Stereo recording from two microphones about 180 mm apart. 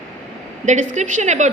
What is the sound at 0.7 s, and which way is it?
Speech, 40° right (ahead or behind).